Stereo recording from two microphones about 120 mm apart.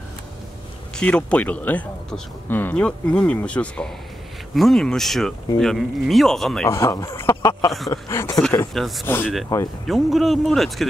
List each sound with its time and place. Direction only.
0.9 s speech: 10° left (ahead or behind)
6.7 s speech: 25° left (ahead or behind)
8.7 s speech: centre (ahead or behind)
9.0 s speech: 20° left (ahead or behind)
9.8 s speech: centre (ahead or behind)